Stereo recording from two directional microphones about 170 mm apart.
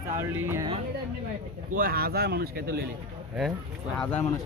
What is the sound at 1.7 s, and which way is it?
Speech, 60° right (ahead or behind).